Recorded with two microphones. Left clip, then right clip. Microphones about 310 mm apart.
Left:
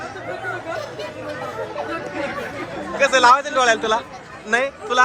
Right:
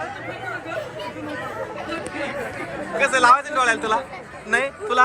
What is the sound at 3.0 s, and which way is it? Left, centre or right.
A man's voice, left.